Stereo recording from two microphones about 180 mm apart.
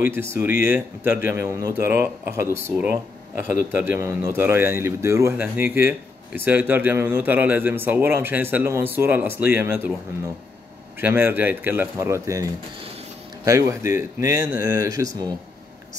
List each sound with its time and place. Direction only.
0.1 s a man's voice: 15° right (ahead or behind)
11.0 s a man's voice: 10° right (ahead or behind)
13.5 s speech: 20° right (ahead or behind)